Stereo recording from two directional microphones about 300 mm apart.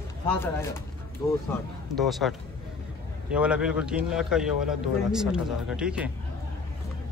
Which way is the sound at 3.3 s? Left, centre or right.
Centre.